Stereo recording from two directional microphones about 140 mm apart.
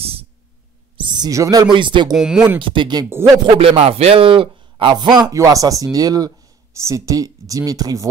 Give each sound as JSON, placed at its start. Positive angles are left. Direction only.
{"t": 0.0, "sound": "a sound", "side_deg": -45}
{"t": 0.9, "sound": "speech", "side_deg": -30}
{"t": 2.1, "sound": "speech", "side_deg": -5}
{"t": 2.6, "sound": "speech", "side_deg": -35}
{"t": 3.5, "sound": "a man's voice", "side_deg": -45}